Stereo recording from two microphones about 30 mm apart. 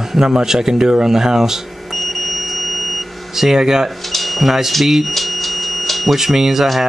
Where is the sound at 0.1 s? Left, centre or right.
Centre.